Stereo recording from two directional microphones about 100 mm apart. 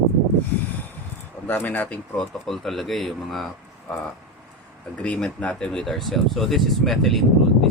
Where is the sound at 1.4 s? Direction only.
15° left (ahead or behind).